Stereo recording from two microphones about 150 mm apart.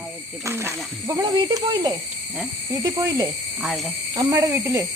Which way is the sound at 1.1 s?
30° right (ahead or behind).